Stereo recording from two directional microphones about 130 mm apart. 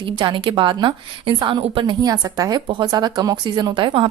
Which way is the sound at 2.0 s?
25° right (ahead or behind).